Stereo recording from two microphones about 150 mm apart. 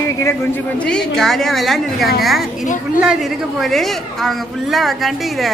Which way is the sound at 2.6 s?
60° left (ahead or behind).